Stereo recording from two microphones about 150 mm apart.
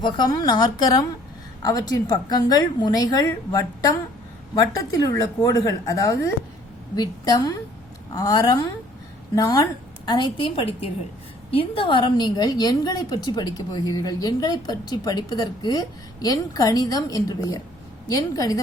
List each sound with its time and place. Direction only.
0.0 s a woman's voice: 25° left (ahead or behind)